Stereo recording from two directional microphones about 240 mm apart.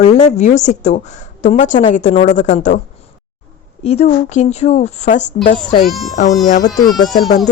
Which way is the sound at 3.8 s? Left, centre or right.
Left.